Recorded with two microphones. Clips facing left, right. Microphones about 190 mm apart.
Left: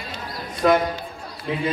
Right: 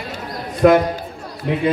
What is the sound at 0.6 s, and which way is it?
Speech, 60° right (ahead or behind).